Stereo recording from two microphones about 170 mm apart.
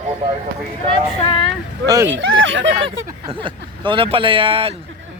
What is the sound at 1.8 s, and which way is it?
Speech, 20° right (ahead or behind).